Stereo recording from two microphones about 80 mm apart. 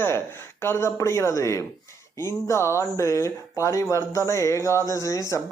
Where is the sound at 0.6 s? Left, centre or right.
Left.